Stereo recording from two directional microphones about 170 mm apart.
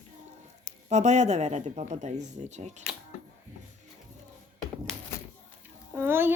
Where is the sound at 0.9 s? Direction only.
45° right (ahead or behind).